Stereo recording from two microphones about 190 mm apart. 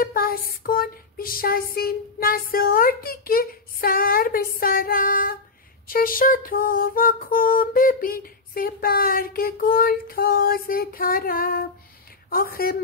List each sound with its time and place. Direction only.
0.0 s female singing: 50° left (ahead or behind)